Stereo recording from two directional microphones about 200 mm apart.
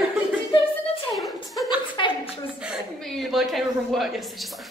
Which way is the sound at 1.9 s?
25° left (ahead or behind).